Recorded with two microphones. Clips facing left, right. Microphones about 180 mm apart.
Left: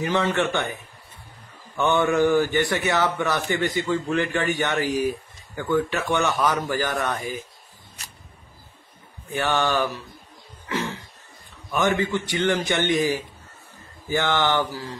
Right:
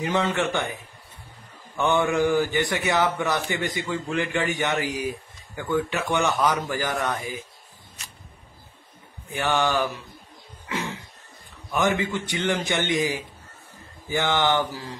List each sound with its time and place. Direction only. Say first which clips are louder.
0.0 s speech: left 1 dB; 15° right (ahead or behind)
1.8 s speech: left 2 dB; 10° right (ahead or behind)
9.3 s speech: left 1 dB; 15° right (ahead or behind)
11.7 s speech: left 1 dB; 15° right (ahead or behind)